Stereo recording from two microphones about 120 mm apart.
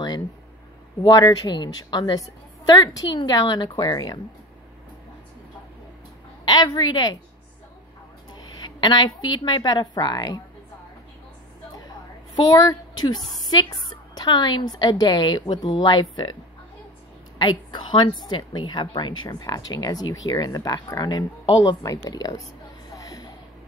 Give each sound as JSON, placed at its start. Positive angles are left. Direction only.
{"t": 1.0, "sound": "a woman's voice", "side_deg": 35}
{"t": 6.4, "sound": "a woman's voice", "side_deg": 40}
{"t": 8.3, "sound": "a woman's voice", "side_deg": 35}
{"t": 12.4, "sound": "a woman's voice", "side_deg": 35}
{"t": 17.4, "sound": "a woman's voice", "side_deg": 40}
{"t": 22.9, "sound": "a sound", "side_deg": 30}